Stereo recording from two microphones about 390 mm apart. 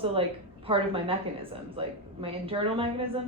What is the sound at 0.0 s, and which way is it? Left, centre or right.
Speech, centre.